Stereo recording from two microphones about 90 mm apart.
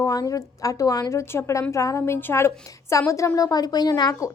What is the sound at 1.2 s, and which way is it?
A woman's voice, 30° left (ahead or behind).